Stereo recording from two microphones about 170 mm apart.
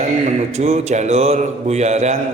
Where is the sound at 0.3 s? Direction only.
40° right (ahead or behind).